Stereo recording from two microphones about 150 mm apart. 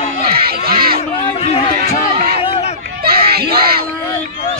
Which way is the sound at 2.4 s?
35° left (ahead or behind).